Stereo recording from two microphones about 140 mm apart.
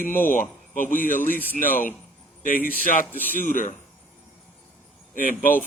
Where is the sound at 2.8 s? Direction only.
75° left (ahead or behind).